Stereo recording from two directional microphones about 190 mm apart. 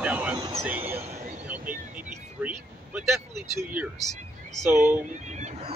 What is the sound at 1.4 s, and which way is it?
Vehicle, 10° right (ahead or behind).